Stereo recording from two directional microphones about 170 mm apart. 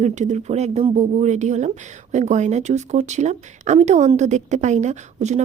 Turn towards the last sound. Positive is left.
turn(degrees=-40)  # may be behind; listen again after turning